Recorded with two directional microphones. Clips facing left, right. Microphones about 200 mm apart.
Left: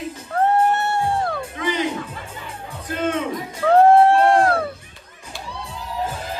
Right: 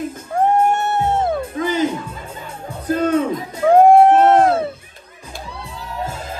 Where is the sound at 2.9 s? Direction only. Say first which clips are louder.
Right 6 dB; 40° right (ahead or behind).